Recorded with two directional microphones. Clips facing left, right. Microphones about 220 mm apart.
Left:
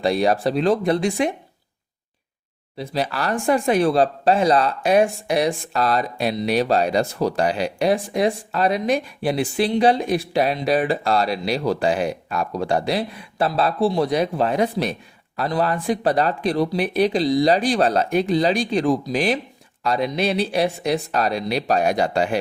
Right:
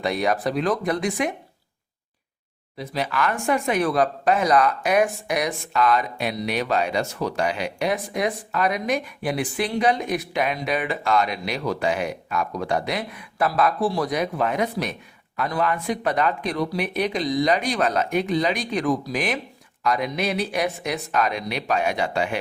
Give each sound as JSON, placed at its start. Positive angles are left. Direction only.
{"t": 0.0, "sound": "speech", "side_deg": 30}
{"t": 2.7, "sound": "speech", "side_deg": 30}